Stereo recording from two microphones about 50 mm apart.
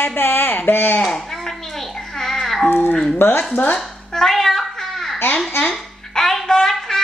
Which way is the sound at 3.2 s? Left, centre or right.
Left.